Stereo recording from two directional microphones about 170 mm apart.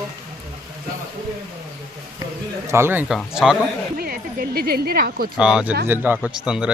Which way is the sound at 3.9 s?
60° right (ahead or behind).